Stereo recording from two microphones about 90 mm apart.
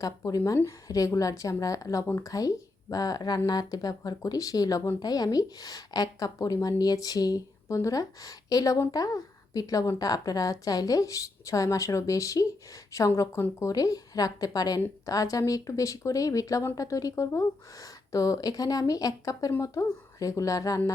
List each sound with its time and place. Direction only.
0.2 s a woman's voice: 40° left (ahead or behind)
2.9 s a woman's voice: 45° left (ahead or behind)